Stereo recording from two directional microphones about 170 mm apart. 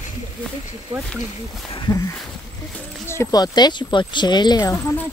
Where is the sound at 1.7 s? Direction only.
20° left (ahead or behind).